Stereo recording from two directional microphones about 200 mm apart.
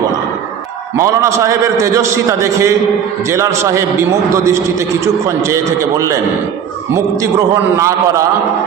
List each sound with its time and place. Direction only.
0.9 s a man's voice: 15° right (ahead or behind)